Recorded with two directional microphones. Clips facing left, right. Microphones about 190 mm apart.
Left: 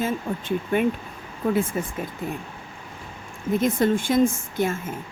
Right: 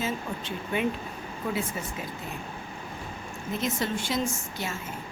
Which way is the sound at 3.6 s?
50° left (ahead or behind).